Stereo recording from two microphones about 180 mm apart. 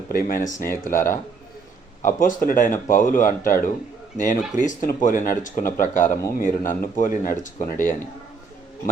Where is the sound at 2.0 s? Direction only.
45° left (ahead or behind).